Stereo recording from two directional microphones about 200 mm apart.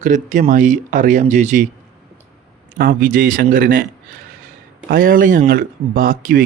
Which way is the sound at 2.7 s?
50° right (ahead or behind).